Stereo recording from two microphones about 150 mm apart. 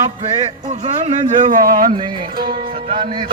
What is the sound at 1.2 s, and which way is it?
Speech, 60° right (ahead or behind).